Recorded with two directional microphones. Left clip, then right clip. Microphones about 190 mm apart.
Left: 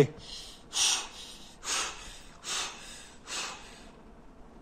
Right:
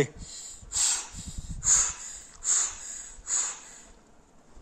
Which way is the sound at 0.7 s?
5° right (ahead or behind).